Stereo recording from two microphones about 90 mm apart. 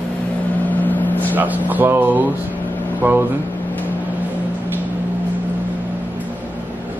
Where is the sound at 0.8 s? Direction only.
20° left (ahead or behind).